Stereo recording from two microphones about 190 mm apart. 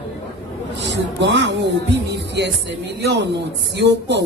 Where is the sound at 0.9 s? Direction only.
65° right (ahead or behind).